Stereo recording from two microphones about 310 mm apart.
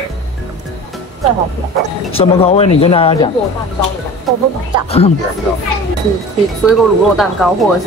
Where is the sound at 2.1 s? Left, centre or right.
Centre.